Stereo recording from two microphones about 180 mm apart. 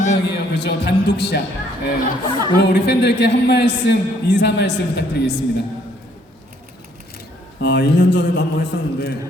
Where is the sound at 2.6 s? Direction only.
70° left (ahead or behind).